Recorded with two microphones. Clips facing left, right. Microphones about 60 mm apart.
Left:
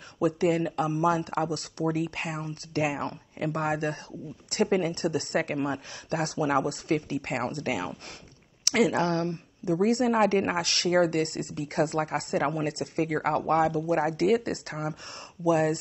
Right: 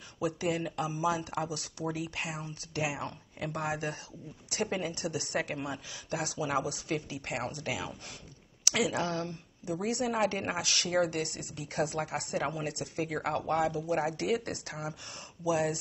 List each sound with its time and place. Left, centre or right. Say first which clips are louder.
0.2 s a woman's voice: left 7 dB; left